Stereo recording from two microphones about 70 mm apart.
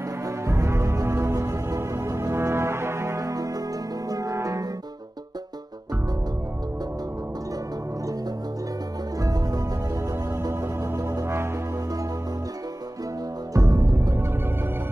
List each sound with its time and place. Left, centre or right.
0.5 s music: right
9.2 s music: right
10.5 s music: right
13.5 s music: right